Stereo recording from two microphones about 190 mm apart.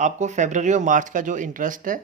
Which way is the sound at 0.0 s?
40° right (ahead or behind).